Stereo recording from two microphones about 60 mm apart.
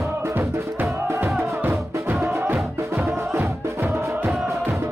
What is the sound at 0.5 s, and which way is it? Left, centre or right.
Music, right.